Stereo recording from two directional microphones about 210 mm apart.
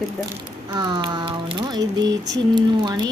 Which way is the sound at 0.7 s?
20° right (ahead or behind).